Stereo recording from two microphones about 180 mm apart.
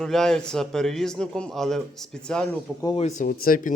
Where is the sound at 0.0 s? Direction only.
5° left (ahead or behind).